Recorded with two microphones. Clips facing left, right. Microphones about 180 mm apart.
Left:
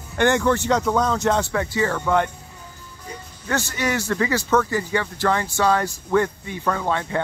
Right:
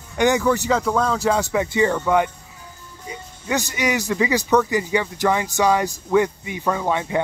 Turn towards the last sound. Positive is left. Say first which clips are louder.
# right 2 dB
turn(degrees=-15)  # may be behind; listen again after turning